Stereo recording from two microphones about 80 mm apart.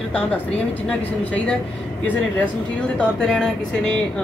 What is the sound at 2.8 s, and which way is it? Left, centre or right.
Speech, centre.